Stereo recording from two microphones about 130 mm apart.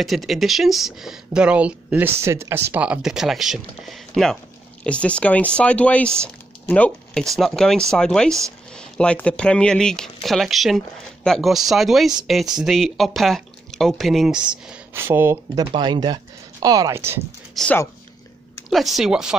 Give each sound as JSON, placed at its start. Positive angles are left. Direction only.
{"t": 0.0, "sound": "speech", "side_deg": 0}
{"t": 6.2, "sound": "a sound", "side_deg": 10}
{"t": 7.2, "sound": "speech", "side_deg": 0}
{"t": 15.0, "sound": "speech", "side_deg": -20}
{"t": 15.5, "sound": "speech", "side_deg": -35}
{"t": 17.6, "sound": "speech", "side_deg": 0}